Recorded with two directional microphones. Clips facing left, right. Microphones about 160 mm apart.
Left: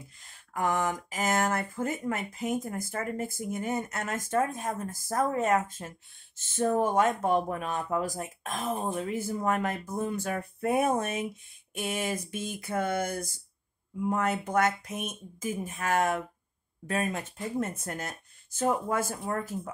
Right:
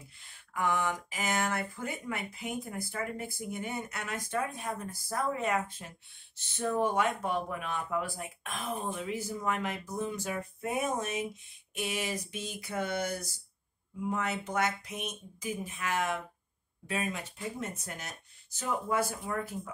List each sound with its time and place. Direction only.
0.2 s speech: 45° left (ahead or behind)